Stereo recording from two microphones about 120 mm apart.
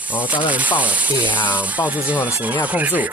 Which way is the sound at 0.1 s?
10° right (ahead or behind).